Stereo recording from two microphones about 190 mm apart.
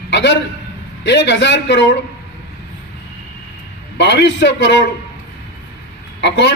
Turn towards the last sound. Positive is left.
turn(degrees=65)  # may be behind; listen again after turning